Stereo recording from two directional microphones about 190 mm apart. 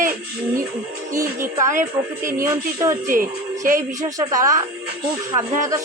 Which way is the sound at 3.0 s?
45° right (ahead or behind).